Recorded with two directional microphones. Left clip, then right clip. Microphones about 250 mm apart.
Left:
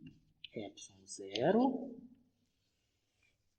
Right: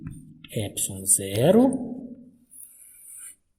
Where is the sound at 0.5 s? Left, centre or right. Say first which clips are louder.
Right 16 dB; right.